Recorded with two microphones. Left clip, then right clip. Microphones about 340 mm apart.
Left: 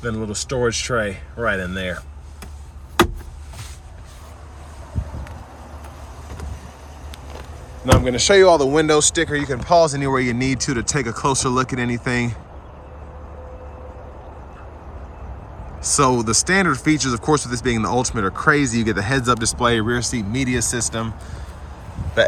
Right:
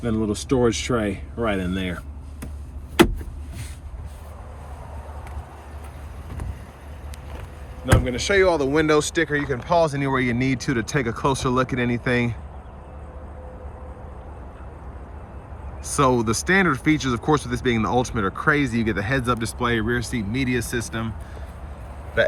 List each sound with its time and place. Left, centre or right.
0.0 s speech: left
1.5 s speech: left
7.9 s speech: centre
15.9 s speech: centre
22.2 s speech: centre